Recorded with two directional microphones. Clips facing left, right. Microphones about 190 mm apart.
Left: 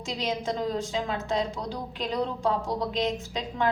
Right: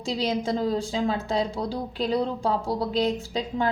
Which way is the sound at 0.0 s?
30° right (ahead or behind).